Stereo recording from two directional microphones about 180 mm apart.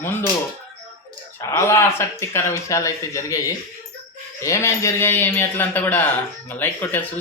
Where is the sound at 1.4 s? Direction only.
15° left (ahead or behind).